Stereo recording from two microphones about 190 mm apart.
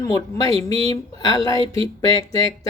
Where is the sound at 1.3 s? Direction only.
25° right (ahead or behind).